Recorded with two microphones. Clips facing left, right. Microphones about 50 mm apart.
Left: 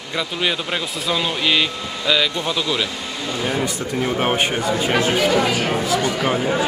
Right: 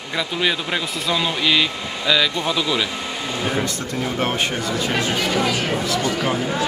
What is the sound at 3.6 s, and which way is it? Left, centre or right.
A man's voice, centre.